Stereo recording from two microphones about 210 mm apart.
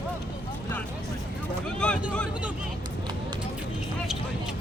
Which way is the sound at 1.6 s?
5° left (ahead or behind).